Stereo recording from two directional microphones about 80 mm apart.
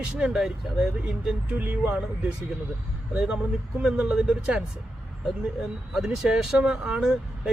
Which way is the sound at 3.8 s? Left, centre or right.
Centre.